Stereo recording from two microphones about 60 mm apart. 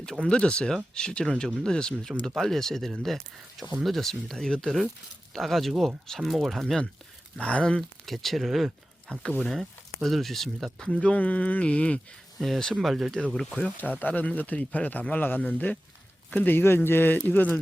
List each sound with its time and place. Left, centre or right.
0.0 s speech: centre
7.3 s speech: centre
7.8 s speech: centre
10.9 s speech: left
12.4 s speech: centre
13.3 s speech: centre
14.0 s speech: left